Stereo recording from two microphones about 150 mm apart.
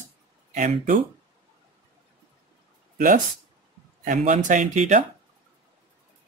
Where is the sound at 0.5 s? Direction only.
50° right (ahead or behind).